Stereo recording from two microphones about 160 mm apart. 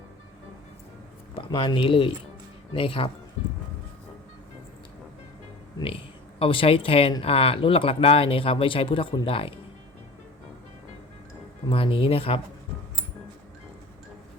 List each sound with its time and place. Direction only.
1.4 s speech: 30° left (ahead or behind)
6.4 s speech: 35° left (ahead or behind)
11.7 s speech: 35° left (ahead or behind)